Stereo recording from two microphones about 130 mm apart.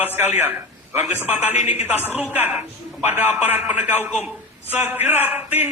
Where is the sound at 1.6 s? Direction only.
60° left (ahead or behind).